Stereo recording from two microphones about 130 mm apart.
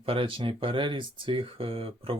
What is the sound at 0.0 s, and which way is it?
Speech, 45° right (ahead or behind).